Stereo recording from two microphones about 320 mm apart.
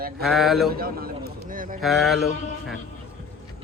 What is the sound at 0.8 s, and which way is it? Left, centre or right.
Speech, right.